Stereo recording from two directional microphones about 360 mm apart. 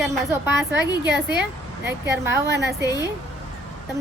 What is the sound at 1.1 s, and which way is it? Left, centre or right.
Speech, right.